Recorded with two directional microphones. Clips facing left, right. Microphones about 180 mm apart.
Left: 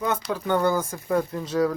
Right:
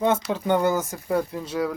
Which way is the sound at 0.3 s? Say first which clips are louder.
Right 1 dB; 20° right (ahead or behind).